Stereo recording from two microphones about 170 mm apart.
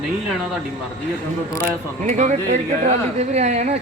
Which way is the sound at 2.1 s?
45° right (ahead or behind).